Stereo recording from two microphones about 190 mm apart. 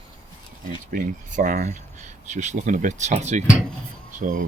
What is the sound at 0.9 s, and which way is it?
Speech, 45° right (ahead or behind).